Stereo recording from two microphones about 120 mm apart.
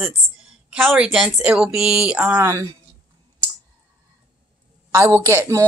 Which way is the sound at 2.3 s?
25° right (ahead or behind).